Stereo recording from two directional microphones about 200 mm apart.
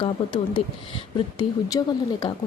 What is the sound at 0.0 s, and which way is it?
Speech, 25° left (ahead or behind).